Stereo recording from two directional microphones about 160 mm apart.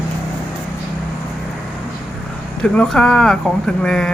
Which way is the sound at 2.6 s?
5° left (ahead or behind).